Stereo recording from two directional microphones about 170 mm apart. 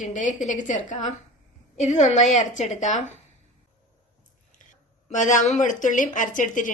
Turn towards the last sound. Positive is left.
turn(degrees=50)  # may be behind; listen again after turning